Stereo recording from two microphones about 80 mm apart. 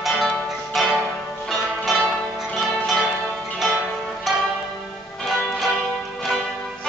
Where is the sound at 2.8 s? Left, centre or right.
Centre.